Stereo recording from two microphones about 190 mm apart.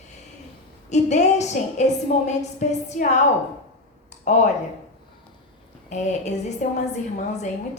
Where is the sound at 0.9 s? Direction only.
35° left (ahead or behind).